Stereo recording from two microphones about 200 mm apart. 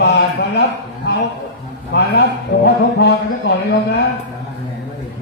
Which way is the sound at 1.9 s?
55° left (ahead or behind).